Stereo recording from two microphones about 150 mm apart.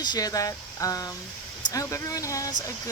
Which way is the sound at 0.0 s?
25° left (ahead or behind).